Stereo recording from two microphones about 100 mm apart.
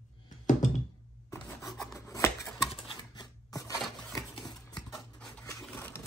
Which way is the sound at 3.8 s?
Centre (ahead or behind).